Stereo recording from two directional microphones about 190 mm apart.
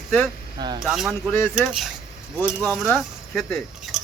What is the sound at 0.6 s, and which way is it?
Speech, 20° right (ahead or behind).